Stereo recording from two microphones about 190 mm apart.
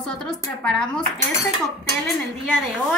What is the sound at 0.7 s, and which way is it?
Speech, 5° left (ahead or behind).